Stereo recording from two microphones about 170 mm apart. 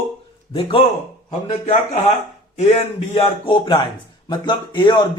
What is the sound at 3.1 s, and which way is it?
Speech, 30° left (ahead or behind).